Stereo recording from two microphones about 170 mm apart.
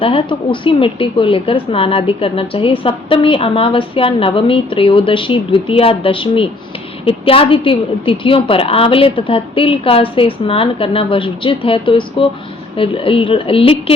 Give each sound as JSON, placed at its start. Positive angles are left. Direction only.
{"t": 0.0, "sound": "a woman's voice", "side_deg": 30}